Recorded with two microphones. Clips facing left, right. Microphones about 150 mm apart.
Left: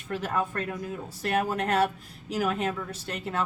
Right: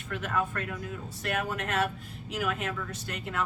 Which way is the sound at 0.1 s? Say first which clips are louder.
Left 2 dB; 30° left (ahead or behind).